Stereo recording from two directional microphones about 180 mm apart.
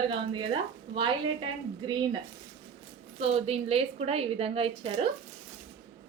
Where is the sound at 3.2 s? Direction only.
35° right (ahead or behind).